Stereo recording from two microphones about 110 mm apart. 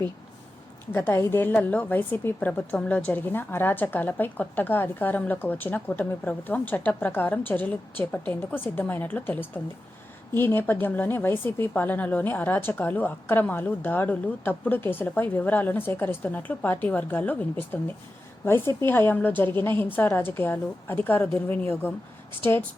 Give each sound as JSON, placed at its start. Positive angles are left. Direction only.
{"t": 0.9, "sound": "a woman's voice", "side_deg": 25}